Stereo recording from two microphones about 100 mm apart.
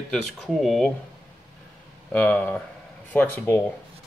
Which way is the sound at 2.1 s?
15° left (ahead or behind).